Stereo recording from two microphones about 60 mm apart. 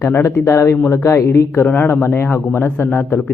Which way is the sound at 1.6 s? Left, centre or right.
Left.